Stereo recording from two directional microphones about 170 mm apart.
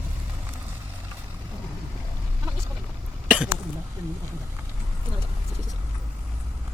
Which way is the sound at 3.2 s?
5° right (ahead or behind).